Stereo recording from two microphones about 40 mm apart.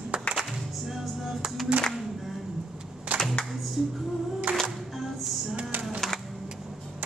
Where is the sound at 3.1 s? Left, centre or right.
Right.